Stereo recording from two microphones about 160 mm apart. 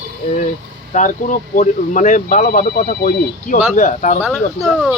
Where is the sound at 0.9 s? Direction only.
55° left (ahead or behind).